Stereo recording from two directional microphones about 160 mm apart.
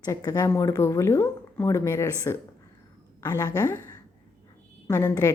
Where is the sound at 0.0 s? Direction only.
25° left (ahead or behind).